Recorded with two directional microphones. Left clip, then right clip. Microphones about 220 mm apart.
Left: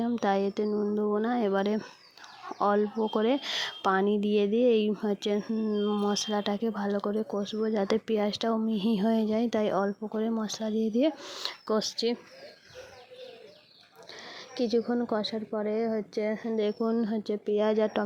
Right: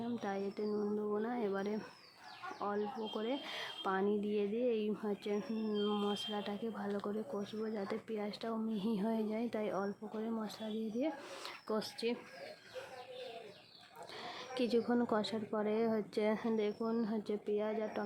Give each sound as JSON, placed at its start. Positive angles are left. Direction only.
{"t": 0.0, "sound": "speech", "side_deg": 40}
{"t": 6.1, "sound": "speech", "side_deg": 35}
{"t": 14.3, "sound": "speech", "side_deg": 20}
{"t": 16.6, "sound": "speech", "side_deg": 30}